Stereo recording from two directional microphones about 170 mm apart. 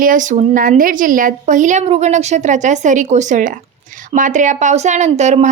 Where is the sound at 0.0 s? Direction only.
50° right (ahead or behind).